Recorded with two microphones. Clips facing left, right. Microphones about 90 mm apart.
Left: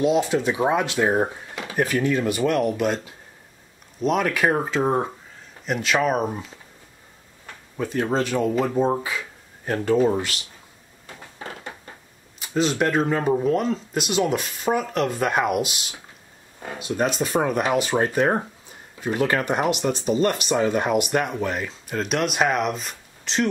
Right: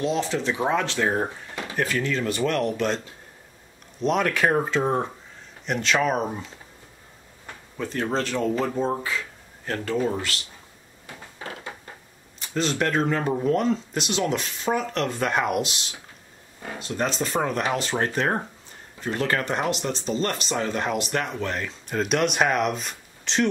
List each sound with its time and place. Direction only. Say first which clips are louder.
0.0 s speech: left 5 dB; 15° left (ahead or behind)
4.0 s speech: left 1 dB; 5° left (ahead or behind)
7.7 s speech: left 3 dB; 10° left (ahead or behind)
12.4 s speech: left 3 dB; 5° left (ahead or behind)
16.7 s speech: left 3 dB; 10° left (ahead or behind)